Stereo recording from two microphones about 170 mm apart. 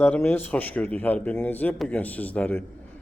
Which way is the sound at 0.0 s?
10° left (ahead or behind).